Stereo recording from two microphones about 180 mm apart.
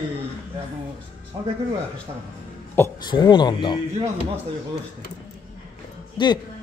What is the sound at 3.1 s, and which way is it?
Speech, 25° left (ahead or behind).